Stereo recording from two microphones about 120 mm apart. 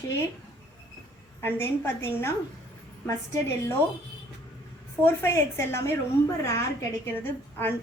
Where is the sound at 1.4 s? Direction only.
20° left (ahead or behind).